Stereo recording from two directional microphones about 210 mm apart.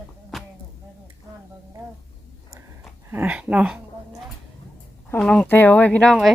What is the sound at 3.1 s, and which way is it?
Speech, 5° right (ahead or behind).